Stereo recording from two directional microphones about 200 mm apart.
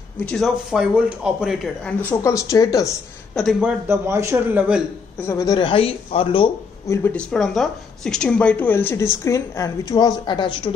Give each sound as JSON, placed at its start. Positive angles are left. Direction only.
{"t": 0.2, "sound": "speech", "side_deg": 5}
{"t": 3.3, "sound": "speech", "side_deg": 0}
{"t": 3.8, "sound": "a man's voice", "side_deg": -15}
{"t": 5.2, "sound": "speech", "side_deg": 15}
{"t": 6.9, "sound": "speech", "side_deg": 10}